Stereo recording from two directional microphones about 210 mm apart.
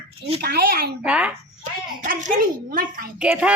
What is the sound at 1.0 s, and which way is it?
Speech, 5° right (ahead or behind).